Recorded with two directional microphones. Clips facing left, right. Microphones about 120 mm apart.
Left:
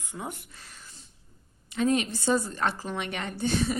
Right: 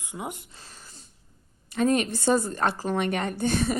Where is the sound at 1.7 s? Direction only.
50° right (ahead or behind).